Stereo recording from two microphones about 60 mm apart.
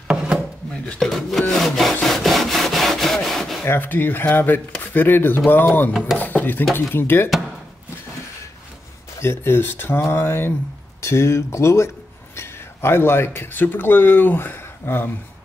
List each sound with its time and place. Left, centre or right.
1.0 s speech: centre
1.5 s wood: centre
3.6 s speech: left
7.2 s a sound: centre
9.2 s speech: left
12.4 s speech: left